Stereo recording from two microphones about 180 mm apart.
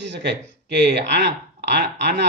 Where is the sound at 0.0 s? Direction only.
70° right (ahead or behind).